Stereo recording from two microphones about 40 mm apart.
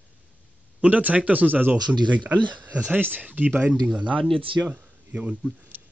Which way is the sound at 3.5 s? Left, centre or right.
Right.